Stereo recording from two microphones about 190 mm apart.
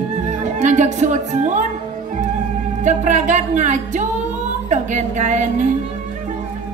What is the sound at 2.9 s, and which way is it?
Speech, 40° right (ahead or behind).